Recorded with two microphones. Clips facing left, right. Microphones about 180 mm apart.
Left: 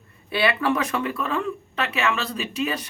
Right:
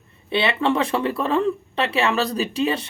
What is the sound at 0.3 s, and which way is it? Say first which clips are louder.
Speech: right 2 dB; 25° right (ahead or behind).